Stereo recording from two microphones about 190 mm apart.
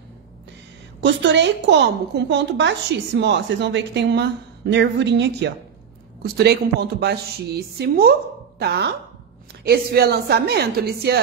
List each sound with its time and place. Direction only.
1.0 s a woman's voice: 65° right (ahead or behind)